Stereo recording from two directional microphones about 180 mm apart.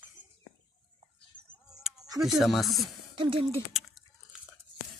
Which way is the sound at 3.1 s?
30° right (ahead or behind).